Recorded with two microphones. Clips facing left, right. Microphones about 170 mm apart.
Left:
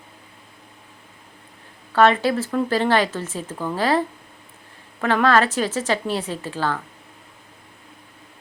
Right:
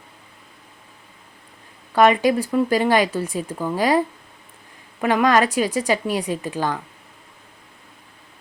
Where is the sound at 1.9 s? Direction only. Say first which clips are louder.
Right 1 dB; 15° right (ahead or behind).